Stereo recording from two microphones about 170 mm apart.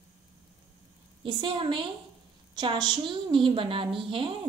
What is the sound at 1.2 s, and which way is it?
A woman's voice, 30° right (ahead or behind).